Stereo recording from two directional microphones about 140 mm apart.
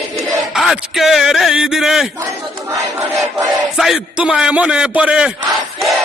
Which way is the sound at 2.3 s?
20° right (ahead or behind).